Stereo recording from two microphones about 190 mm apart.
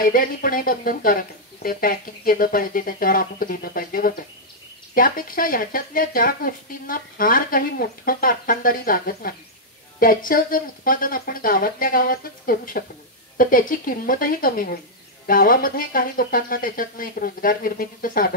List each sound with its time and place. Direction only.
0.0 s speech: 45° left (ahead or behind)